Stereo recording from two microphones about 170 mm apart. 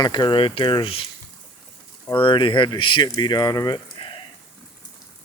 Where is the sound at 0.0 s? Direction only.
25° left (ahead or behind).